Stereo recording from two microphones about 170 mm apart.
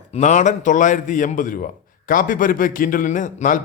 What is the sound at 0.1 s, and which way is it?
A man's voice, 45° left (ahead or behind).